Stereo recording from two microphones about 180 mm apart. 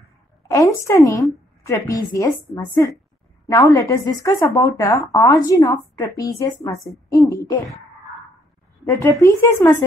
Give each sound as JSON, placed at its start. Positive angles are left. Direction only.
{"t": 0.5, "sound": "a woman's voice", "side_deg": 15}
{"t": 9.0, "sound": "a woman's voice", "side_deg": 15}